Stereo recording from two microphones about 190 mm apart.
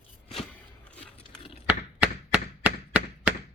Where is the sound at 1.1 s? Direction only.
30° left (ahead or behind).